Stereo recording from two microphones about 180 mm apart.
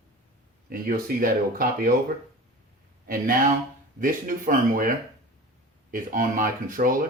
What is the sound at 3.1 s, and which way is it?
Speech, 50° right (ahead or behind).